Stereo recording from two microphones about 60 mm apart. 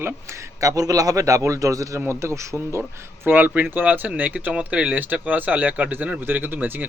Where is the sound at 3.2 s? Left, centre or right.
Right.